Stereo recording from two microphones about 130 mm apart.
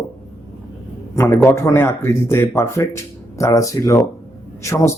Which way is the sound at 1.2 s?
20° left (ahead or behind).